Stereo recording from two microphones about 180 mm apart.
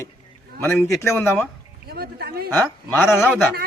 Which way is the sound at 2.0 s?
60° right (ahead or behind).